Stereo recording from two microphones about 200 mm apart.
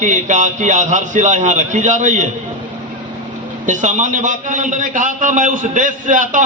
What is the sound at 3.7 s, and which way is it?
A man's voice, 40° right (ahead or behind).